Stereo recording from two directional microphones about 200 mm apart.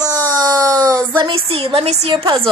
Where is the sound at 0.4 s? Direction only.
20° right (ahead or behind).